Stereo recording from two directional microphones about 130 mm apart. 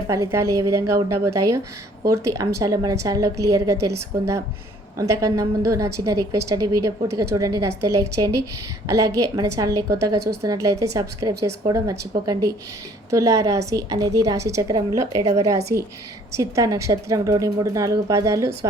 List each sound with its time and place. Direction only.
0.1 s a woman's voice: 25° right (ahead or behind)